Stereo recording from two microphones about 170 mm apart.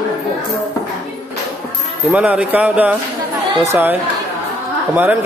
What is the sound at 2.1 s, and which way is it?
Music, 5° right (ahead or behind).